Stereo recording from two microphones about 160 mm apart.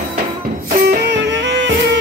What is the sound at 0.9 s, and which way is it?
Music, 90° right.